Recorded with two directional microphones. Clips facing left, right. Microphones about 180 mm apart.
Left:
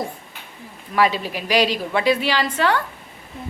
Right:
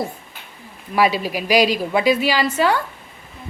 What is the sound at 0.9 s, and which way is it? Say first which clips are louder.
A woman's voice: right 2 dB; 10° right (ahead or behind).